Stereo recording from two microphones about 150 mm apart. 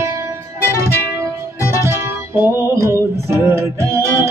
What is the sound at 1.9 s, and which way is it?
Music, 15° right (ahead or behind).